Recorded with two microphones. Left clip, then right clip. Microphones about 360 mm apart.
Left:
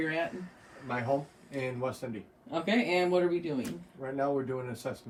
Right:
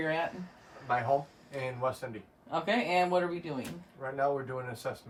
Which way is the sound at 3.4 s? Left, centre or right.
Right.